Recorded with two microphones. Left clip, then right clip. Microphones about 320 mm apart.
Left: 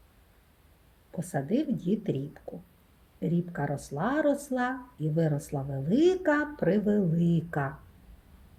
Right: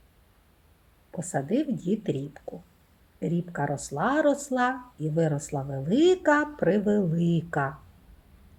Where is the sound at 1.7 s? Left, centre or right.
Centre.